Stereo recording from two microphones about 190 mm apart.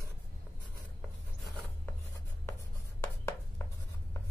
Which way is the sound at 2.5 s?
15° left (ahead or behind).